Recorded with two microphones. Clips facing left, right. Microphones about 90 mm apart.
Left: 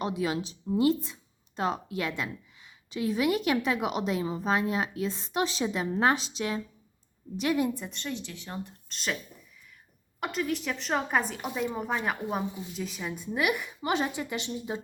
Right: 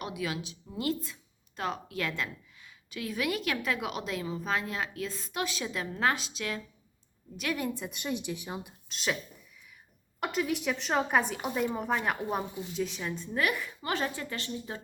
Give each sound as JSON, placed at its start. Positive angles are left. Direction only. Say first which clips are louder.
{"t": 0.0, "sound": "speech", "louder": "left 5 dB", "side_deg": 30}
{"t": 7.8, "sound": "speech", "louder": "right 1 dB", "side_deg": -10}
{"t": 10.2, "sound": "a woman's voice", "louder": "even", "side_deg": -5}